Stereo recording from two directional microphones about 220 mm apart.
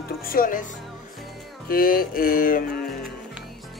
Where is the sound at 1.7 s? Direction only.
40° left (ahead or behind).